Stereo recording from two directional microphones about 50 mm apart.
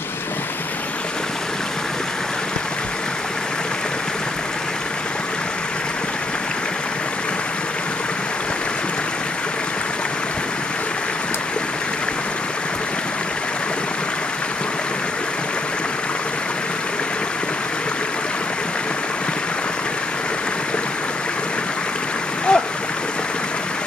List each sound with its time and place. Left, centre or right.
22.5 s stream: centre